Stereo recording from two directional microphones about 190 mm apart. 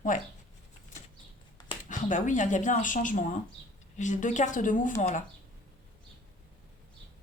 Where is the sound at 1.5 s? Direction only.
25° left (ahead or behind).